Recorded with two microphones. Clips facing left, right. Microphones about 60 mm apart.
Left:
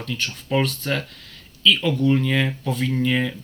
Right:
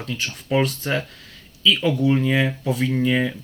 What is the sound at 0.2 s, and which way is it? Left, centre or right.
Speech, centre.